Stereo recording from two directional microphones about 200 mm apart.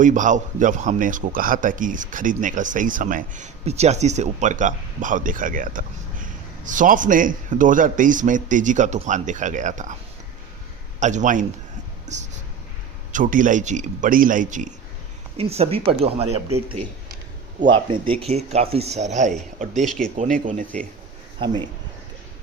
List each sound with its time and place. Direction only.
0.0 s speech: 40° right (ahead or behind)
11.0 s speech: 40° right (ahead or behind)
17.7 s speech: 25° right (ahead or behind)
19.7 s speech: centre (ahead or behind)
20.1 s speech: 40° right (ahead or behind)
21.3 s speech: 20° right (ahead or behind)